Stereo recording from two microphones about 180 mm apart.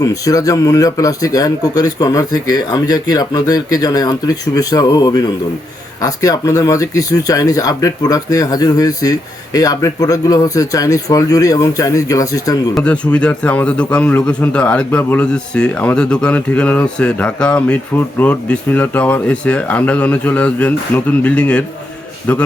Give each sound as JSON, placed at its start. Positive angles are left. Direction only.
{"t": 0.0, "sound": "speech", "side_deg": 20}
{"t": 12.7, "sound": "a man's voice", "side_deg": 5}